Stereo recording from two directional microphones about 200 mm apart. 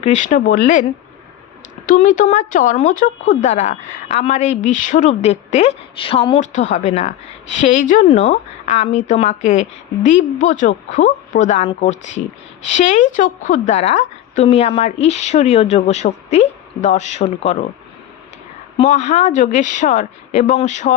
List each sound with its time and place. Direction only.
0.0 s a woman's voice: 40° left (ahead or behind)
1.9 s a woman's voice: 40° left (ahead or behind)
18.8 s a woman's voice: 35° left (ahead or behind)